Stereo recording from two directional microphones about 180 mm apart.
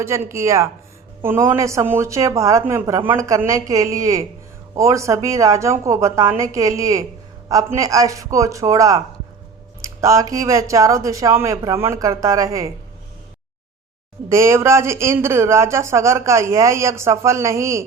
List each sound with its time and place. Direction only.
0.0 s speech: 15° right (ahead or behind)
14.3 s speech: 15° right (ahead or behind)